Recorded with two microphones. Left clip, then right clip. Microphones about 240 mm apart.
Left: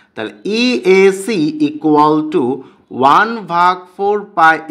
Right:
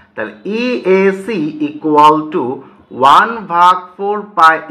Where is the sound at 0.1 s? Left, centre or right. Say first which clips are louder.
Left 1 dB; left.